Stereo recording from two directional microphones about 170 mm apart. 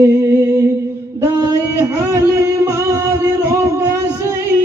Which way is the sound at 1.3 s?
20° right (ahead or behind).